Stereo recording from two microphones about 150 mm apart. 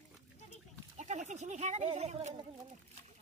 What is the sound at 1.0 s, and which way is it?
Speech, 50° right (ahead or behind).